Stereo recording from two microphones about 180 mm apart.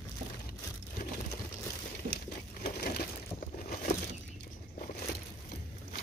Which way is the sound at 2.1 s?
60° left (ahead or behind).